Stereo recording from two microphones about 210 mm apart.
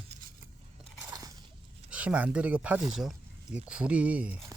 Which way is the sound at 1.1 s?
15° right (ahead or behind).